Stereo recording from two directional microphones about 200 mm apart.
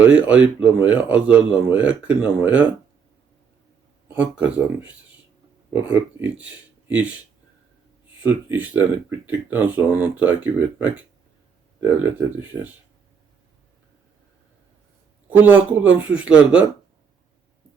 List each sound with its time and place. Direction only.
0.0 s speech: 5° right (ahead or behind)
4.1 s speech: 5° right (ahead or behind)
8.2 s speech: 10° right (ahead or behind)
15.3 s speech: 10° right (ahead or behind)